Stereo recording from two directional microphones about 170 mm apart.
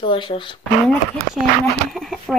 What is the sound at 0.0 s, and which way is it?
Speech, 30° left (ahead or behind).